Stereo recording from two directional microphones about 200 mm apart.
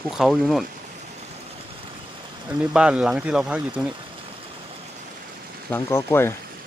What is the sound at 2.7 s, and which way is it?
Speech, 5° right (ahead or behind).